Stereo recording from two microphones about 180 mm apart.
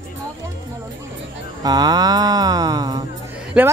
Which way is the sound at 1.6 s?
20° right (ahead or behind).